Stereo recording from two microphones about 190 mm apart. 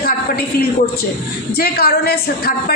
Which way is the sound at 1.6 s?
55° left (ahead or behind).